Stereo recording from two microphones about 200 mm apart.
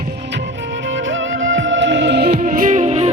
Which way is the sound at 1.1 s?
70° right (ahead or behind).